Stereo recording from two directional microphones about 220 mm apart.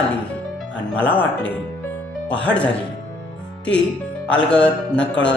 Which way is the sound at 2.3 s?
5° left (ahead or behind).